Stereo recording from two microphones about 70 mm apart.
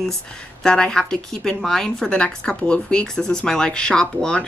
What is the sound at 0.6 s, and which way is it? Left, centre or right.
Speech, centre.